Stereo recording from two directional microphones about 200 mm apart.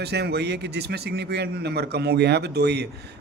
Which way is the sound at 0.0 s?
55° right (ahead or behind).